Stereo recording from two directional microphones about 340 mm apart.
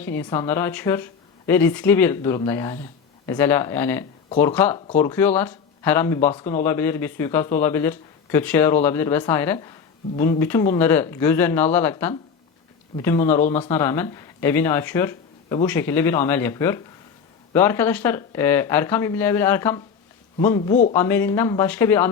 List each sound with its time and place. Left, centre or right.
0.0 s speech: centre
20.6 s speech: centre
20.9 s speech: centre